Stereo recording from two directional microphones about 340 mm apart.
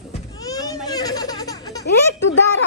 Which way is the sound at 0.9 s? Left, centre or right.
Centre.